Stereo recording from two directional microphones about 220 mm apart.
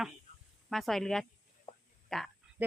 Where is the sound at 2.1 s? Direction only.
Centre (ahead or behind).